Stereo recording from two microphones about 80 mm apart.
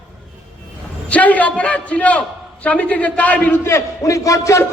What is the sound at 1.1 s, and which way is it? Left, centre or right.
A man's voice, centre.